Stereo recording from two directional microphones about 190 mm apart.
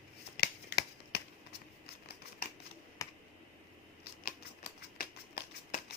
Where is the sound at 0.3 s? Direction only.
55° left (ahead or behind).